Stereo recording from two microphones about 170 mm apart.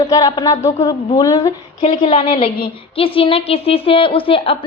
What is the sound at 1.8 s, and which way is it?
A woman's voice, 35° left (ahead or behind).